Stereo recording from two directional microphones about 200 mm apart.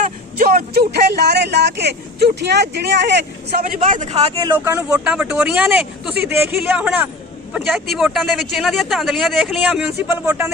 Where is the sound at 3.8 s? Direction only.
40° right (ahead or behind).